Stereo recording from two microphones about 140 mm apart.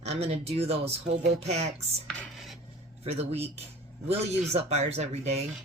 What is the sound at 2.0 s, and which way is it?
Dishes, centre (ahead or behind).